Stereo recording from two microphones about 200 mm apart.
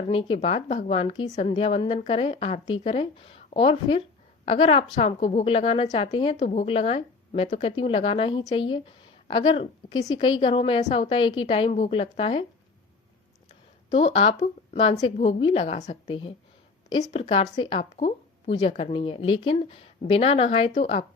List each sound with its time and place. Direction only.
0.1 s a woman's voice: 25° left (ahead or behind)
13.9 s a woman's voice: 30° left (ahead or behind)